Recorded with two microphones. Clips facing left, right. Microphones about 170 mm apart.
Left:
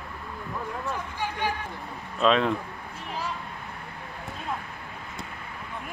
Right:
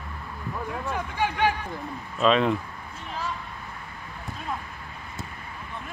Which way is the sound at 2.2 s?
Centre (ahead or behind).